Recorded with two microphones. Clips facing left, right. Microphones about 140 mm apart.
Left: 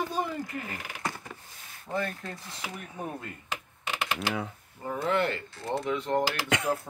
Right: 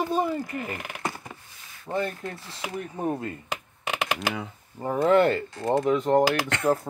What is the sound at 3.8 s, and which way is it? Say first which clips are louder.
Typing: right 4 dB; 65° right (ahead or behind).